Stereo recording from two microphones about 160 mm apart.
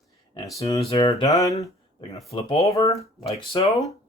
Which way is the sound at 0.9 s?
35° left (ahead or behind).